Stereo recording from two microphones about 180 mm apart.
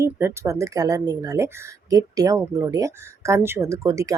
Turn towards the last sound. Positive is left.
turn(degrees=-15)  # may be behind; listen again after turning